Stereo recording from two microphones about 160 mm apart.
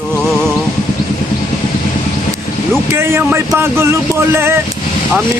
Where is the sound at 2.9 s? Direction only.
15° right (ahead or behind).